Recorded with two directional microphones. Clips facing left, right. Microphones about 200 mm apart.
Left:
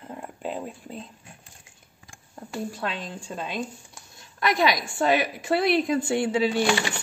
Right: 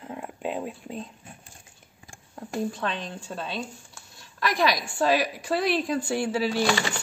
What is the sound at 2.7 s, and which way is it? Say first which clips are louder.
Speech: right 1 dB; 10° left (ahead or behind).